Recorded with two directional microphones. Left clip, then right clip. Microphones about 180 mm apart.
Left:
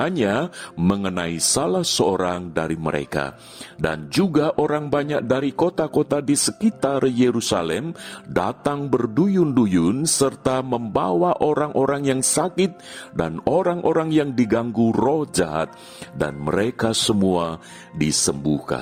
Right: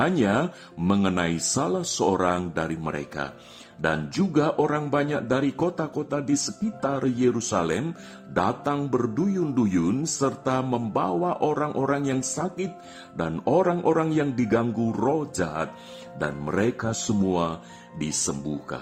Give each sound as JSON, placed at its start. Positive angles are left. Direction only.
{"t": 0.0, "sound": "speech", "side_deg": 45}